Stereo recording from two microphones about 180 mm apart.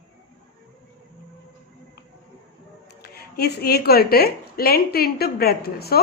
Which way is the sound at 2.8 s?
65° left (ahead or behind).